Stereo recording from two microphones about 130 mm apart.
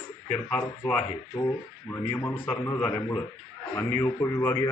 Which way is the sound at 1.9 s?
20° left (ahead or behind).